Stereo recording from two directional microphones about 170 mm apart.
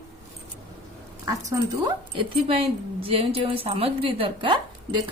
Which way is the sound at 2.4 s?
35° right (ahead or behind).